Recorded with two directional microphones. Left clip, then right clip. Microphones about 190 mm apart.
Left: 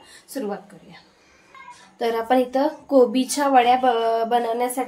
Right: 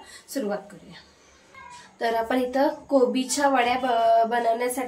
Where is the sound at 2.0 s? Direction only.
35° left (ahead or behind).